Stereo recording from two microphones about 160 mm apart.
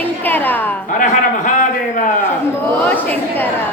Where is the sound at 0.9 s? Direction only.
55° left (ahead or behind).